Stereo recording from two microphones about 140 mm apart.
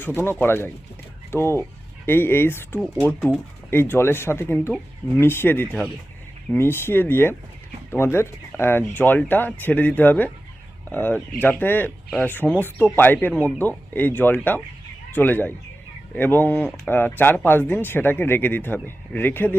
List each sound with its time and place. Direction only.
0.0 s speech: 15° left (ahead or behind)